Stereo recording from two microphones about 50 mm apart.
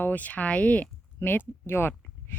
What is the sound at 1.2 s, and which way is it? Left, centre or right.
Speech, left.